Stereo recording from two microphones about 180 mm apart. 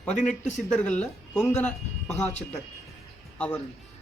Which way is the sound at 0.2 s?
40° left (ahead or behind).